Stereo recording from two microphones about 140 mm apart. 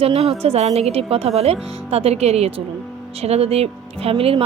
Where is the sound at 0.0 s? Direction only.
45° right (ahead or behind).